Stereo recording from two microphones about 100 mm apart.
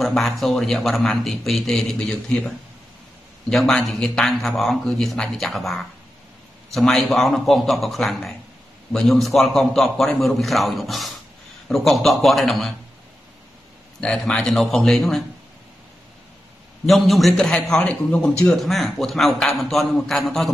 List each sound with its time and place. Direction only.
0.0 s speech: centre (ahead or behind)
14.0 s speech: 10° left (ahead or behind)
16.8 s speech: centre (ahead or behind)